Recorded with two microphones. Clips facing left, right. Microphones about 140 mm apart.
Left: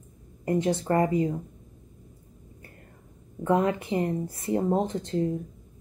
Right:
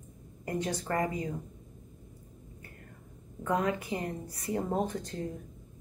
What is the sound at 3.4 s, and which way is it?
Speech, 30° left (ahead or behind).